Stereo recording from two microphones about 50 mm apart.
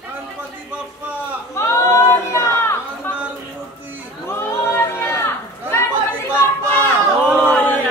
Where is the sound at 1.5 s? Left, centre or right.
Left.